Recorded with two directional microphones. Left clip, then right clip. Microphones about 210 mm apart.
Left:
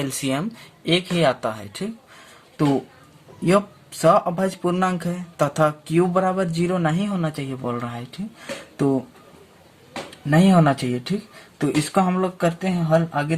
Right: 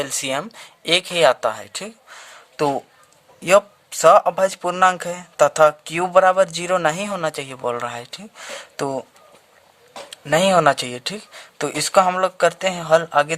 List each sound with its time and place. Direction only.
0.0 s speech: 40° right (ahead or behind)
4.0 s speech: 40° right (ahead or behind)
10.2 s speech: 50° right (ahead or behind)